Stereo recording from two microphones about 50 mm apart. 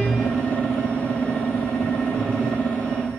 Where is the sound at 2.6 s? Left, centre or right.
Left.